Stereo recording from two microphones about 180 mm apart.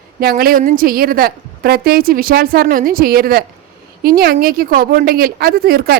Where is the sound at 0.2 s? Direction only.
55° right (ahead or behind).